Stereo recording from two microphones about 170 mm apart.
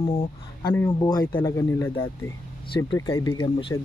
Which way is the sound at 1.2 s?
15° left (ahead or behind).